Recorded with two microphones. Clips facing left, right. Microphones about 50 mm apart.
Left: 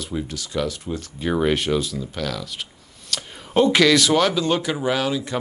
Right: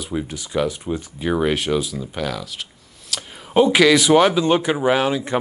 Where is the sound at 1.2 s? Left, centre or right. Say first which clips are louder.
Even; centre.